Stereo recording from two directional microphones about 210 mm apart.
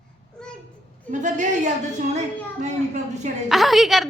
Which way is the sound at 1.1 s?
35° right (ahead or behind).